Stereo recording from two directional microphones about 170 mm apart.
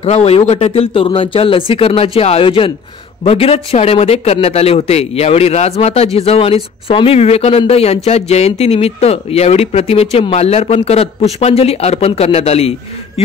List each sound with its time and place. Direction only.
0.0 s speech: 40° left (ahead or behind)